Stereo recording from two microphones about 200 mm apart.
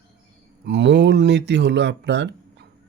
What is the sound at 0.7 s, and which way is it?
Speech, 60° right (ahead or behind).